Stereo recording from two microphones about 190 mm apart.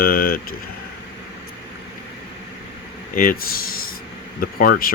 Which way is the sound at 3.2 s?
50° left (ahead or behind).